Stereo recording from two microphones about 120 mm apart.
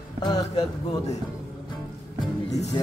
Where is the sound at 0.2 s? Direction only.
35° left (ahead or behind).